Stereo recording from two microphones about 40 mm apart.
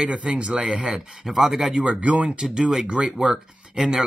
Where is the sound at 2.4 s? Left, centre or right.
Centre.